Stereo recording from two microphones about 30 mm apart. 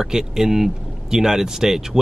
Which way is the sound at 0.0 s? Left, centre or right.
Centre.